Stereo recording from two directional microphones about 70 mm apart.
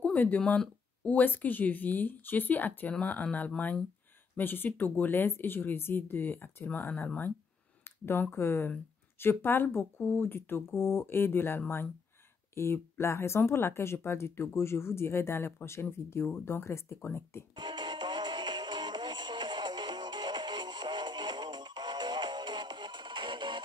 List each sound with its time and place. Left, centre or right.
0.0 s a sound: left
1.0 s speech: left
17.6 s music: right